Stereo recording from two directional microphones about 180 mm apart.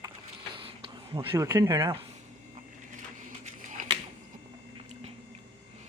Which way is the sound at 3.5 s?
45° right (ahead or behind).